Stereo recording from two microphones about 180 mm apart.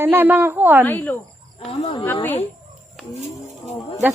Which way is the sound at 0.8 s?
10° left (ahead or behind).